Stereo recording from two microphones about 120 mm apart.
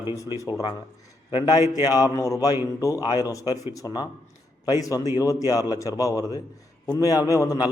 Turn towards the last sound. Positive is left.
turn(degrees=30)  # may be behind; listen again after turning